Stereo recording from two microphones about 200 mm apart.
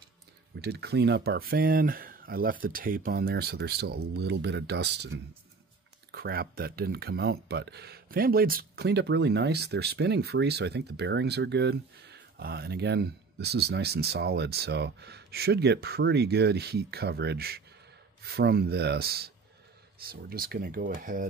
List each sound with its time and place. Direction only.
0.6 s speech: 55° right (ahead or behind)
6.1 s speech: 50° right (ahead or behind)